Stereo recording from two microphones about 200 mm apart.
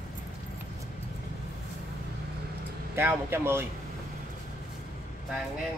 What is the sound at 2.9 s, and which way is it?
Speech, 10° right (ahead or behind).